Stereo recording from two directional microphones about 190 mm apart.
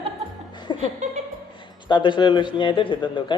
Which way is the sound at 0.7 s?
25° left (ahead or behind).